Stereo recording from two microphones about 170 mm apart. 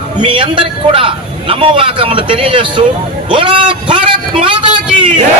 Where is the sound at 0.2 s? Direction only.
30° right (ahead or behind).